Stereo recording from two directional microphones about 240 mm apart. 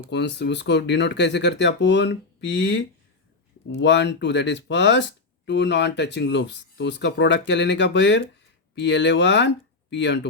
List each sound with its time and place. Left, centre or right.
0.1 s speech: left